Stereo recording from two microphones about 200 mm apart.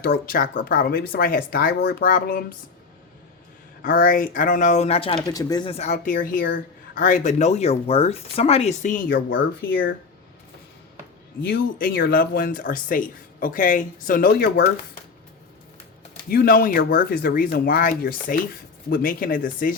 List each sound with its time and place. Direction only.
0.0 s speech: 45° left (ahead or behind)
3.8 s speech: 45° left (ahead or behind)
11.4 s speech: 50° left (ahead or behind)
16.3 s speech: 50° left (ahead or behind)